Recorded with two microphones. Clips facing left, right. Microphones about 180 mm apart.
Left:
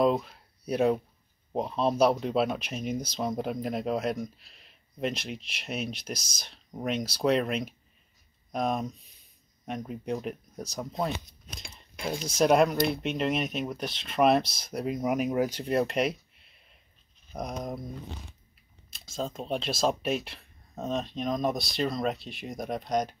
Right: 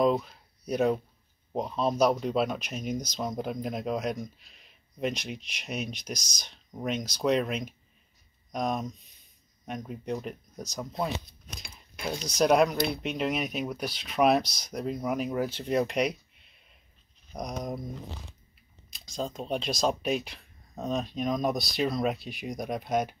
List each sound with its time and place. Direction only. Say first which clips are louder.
0.0 s a sound: even; centre (ahead or behind)
1.5 s speech: left 1 dB; 5° left (ahead or behind)
11.7 s a sound: left 1 dB; 5° right (ahead or behind)
12.2 s speech: even; 5° left (ahead or behind)
15.0 s speech: left 4 dB; 20° left (ahead or behind)
15.6 s speech: even; centre (ahead or behind)
18.9 s speech: even; centre (ahead or behind)